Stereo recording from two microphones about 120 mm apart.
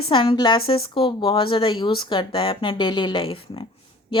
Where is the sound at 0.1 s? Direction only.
45° left (ahead or behind).